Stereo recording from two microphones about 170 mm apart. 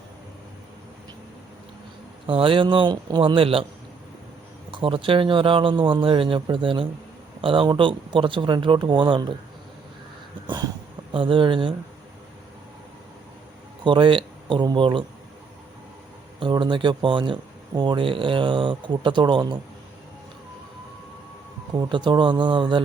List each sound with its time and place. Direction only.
2.2 s speech: 30° right (ahead or behind)
4.7 s speech: 30° right (ahead or behind)
10.4 s a sound: 25° right (ahead or behind)
11.1 s speech: 30° right (ahead or behind)
13.8 s speech: 30° right (ahead or behind)
16.4 s speech: 30° right (ahead or behind)
21.8 s speech: 25° right (ahead or behind)